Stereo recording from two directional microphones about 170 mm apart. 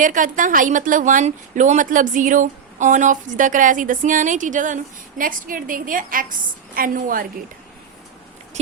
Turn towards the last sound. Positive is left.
turn(degrees=-55)  # may be behind; listen again after turning